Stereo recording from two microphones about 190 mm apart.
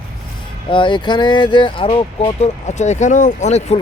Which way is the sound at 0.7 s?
25° left (ahead or behind).